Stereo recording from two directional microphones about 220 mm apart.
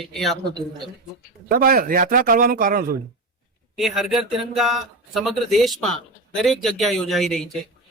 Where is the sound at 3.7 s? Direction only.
Centre (ahead or behind).